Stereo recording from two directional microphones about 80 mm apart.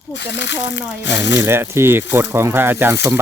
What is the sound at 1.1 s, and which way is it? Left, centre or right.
Speech, right.